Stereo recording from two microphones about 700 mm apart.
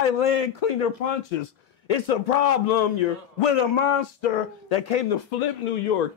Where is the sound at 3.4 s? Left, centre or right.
Left.